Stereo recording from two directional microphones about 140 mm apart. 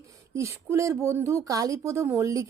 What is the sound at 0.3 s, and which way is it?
Speech, 20° right (ahead or behind).